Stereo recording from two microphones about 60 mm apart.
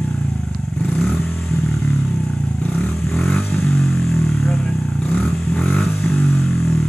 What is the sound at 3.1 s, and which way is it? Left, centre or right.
Vehicle, centre.